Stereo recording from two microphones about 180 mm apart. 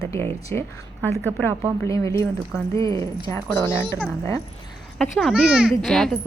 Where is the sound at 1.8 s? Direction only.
15° left (ahead or behind).